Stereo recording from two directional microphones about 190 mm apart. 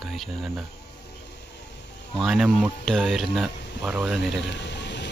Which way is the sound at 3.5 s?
65° left (ahead or behind).